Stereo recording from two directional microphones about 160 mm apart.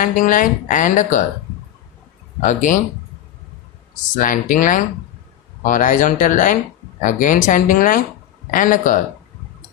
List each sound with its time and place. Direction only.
0.0 s speech: 55° left (ahead or behind)
2.4 s speech: 50° left (ahead or behind)
4.1 s speech: 55° left (ahead or behind)